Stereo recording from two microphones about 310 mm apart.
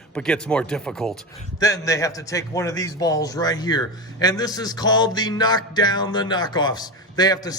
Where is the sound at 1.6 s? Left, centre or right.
Centre.